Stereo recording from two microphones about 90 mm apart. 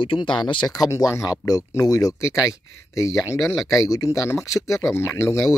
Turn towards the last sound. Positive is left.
turn(degrees=30)  # may be behind; listen again after turning